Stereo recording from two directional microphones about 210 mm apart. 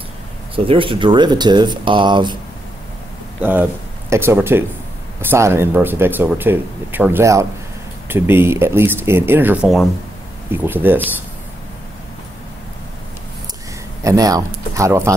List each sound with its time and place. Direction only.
0.7 s speech: 25° right (ahead or behind)
3.3 s speech: 10° right (ahead or behind)
14.0 s speech: 15° right (ahead or behind)